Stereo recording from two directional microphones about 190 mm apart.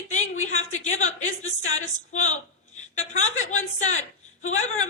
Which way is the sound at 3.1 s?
40° left (ahead or behind).